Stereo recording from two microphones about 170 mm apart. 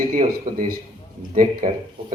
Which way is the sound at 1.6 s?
45° right (ahead or behind).